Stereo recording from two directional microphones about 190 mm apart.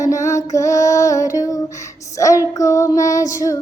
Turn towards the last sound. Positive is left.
turn(degrees=15)  # may be behind; listen again after turning